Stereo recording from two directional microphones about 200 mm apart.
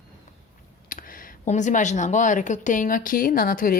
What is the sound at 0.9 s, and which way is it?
Speech, 45° left (ahead or behind).